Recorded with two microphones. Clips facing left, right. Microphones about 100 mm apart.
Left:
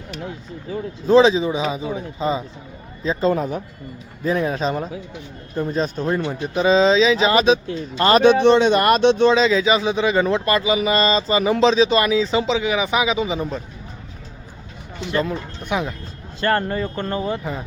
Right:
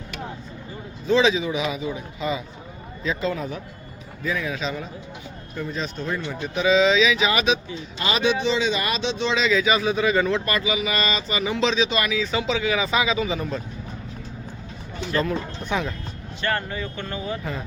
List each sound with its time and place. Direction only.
1.0 s speech: 35° left (ahead or behind)
7.8 s speech: 50° left (ahead or behind)
9.3 s speech: 30° left (ahead or behind)
15.1 s speech: 15° left (ahead or behind)
16.4 s speech: 40° left (ahead or behind)